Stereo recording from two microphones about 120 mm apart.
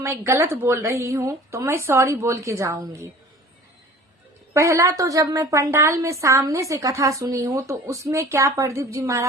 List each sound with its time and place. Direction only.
0.0 s a woman's voice: 20° right (ahead or behind)
4.5 s a woman's voice: 25° right (ahead or behind)